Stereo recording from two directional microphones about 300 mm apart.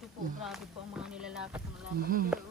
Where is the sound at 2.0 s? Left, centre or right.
Right.